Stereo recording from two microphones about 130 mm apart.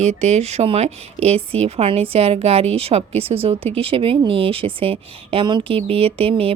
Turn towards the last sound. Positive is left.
turn(degrees=-50)  # may be behind; listen again after turning